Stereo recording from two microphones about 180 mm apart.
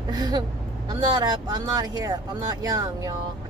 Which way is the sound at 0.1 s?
20° right (ahead or behind).